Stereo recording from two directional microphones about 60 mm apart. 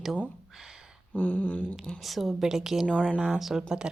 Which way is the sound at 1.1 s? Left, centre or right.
Left.